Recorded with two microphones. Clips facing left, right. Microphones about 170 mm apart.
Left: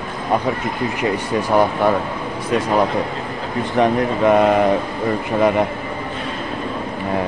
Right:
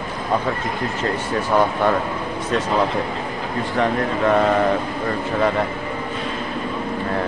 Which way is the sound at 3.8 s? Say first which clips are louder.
Left 4 dB; 15° left (ahead or behind).